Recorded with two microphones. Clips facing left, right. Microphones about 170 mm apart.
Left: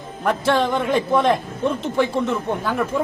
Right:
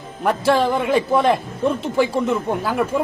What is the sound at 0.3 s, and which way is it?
A man's voice, 5° right (ahead or behind).